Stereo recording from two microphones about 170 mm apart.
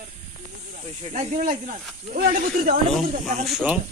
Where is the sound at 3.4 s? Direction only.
5° right (ahead or behind).